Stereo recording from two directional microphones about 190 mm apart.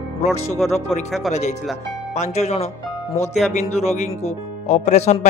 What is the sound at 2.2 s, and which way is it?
Speech, 35° left (ahead or behind).